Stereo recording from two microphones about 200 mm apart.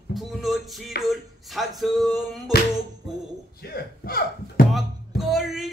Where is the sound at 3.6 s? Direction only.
50° left (ahead or behind).